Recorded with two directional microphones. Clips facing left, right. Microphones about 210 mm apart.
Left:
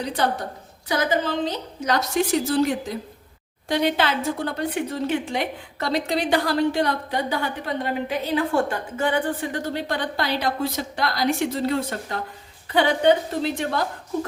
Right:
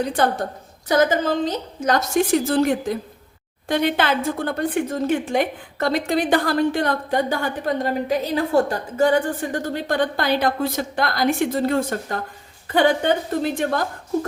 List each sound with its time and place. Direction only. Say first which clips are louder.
0.0 s a woman's voice: right 4 dB; 50° right (ahead or behind)